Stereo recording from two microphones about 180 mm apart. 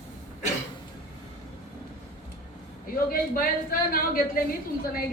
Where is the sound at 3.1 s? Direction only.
50° left (ahead or behind).